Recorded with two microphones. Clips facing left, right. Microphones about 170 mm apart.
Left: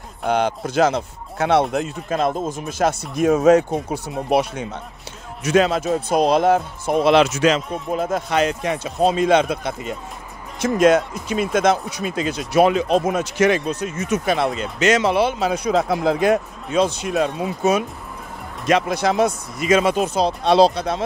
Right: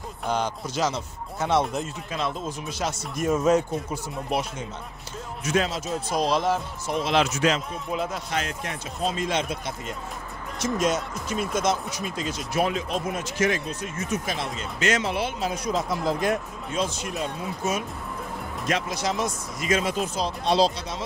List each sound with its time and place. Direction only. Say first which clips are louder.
0.2 s speech: left 7 dB; 65° left (ahead or behind)
2.0 s speech: left 8 dB; 45° left (ahead or behind)
3.3 s speech: left 7 dB; 75° left (ahead or behind)
7.9 s speech: left 7 dB; 45° left (ahead or behind)
8.3 s speech: left 10 dB; 75° left (ahead or behind)
18.7 s speech: left 9 dB; 60° left (ahead or behind)